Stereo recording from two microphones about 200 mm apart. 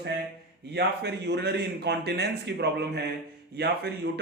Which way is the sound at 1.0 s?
55° right (ahead or behind).